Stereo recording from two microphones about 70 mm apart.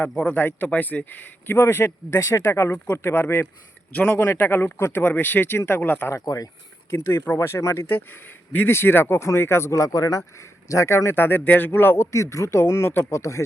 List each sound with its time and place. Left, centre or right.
0.2 s speech: centre; by 2.7 s left
2.7 s speech: left
3.9 s speech: left
6.1 s speech: left
6.9 s speech: left
7.9 s speech: left
12.1 s speech: left
13.1 s speech: left